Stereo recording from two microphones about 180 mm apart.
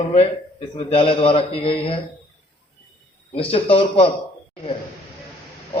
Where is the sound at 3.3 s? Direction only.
30° left (ahead or behind).